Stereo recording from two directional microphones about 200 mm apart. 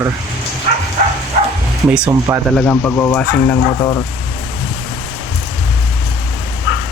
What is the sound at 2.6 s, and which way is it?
Speech, 5° left (ahead or behind).